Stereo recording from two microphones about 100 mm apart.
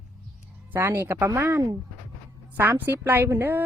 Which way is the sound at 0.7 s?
25° right (ahead or behind).